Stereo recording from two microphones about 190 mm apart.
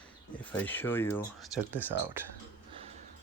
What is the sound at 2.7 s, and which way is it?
Music, 30° right (ahead or behind).